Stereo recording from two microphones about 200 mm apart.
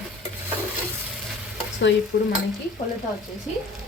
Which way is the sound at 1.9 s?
60° left (ahead or behind).